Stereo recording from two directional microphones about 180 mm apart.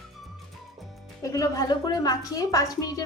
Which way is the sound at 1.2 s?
20° left (ahead or behind).